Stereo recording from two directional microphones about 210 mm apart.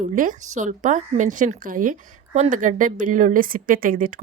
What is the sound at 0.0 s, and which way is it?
A woman's voice, 40° right (ahead or behind).